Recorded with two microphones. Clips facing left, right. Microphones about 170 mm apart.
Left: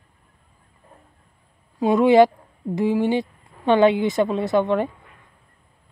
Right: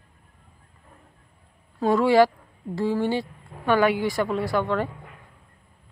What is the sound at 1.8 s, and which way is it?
A woman's voice, 20° left (ahead or behind).